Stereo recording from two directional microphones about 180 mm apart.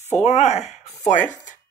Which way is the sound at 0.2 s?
40° left (ahead or behind).